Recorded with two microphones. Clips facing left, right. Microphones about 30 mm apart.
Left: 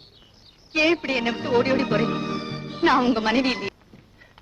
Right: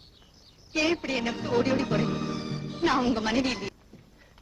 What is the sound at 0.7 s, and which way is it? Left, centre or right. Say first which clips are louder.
Speech: left 6 dB; left.